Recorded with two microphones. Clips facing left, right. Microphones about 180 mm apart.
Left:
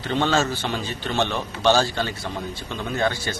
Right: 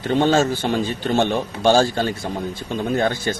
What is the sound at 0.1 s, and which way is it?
A man's voice, 45° right (ahead or behind).